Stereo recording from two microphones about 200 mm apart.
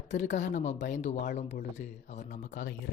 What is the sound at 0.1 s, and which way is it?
Speech, 35° left (ahead or behind).